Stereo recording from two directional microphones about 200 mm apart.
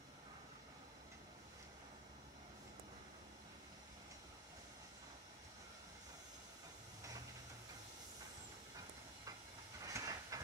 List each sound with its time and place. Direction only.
9.8 s train: 20° right (ahead or behind)